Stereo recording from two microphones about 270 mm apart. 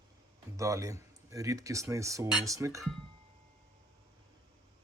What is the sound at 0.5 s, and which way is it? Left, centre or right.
Speech, centre.